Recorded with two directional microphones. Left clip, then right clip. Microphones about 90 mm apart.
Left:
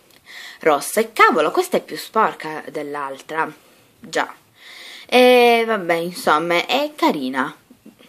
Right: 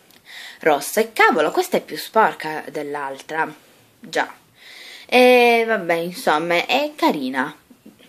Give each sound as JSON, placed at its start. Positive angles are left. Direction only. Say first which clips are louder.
{"t": 0.3, "sound": "speech", "louder": "left 1 dB", "side_deg": 25}